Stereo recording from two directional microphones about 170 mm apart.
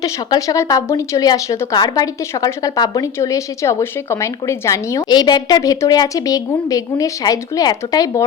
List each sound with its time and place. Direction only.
0.0 s speech: 20° left (ahead or behind)